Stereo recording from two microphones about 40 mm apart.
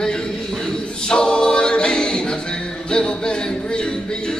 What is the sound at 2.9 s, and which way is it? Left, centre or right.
Music, left.